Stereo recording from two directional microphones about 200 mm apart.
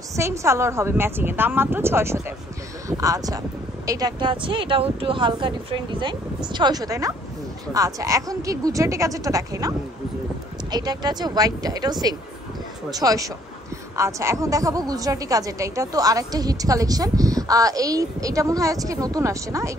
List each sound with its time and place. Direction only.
0.1 s a woman's voice: 15° right (ahead or behind)